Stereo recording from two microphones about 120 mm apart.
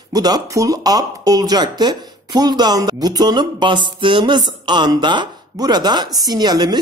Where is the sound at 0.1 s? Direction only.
30° right (ahead or behind).